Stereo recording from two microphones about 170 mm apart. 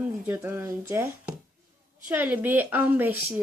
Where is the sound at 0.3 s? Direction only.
15° right (ahead or behind).